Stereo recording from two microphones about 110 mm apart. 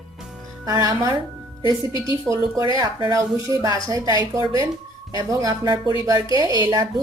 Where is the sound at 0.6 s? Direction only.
35° right (ahead or behind).